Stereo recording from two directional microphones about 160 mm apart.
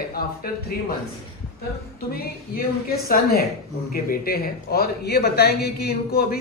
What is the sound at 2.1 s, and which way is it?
A man's voice, 70° left (ahead or behind).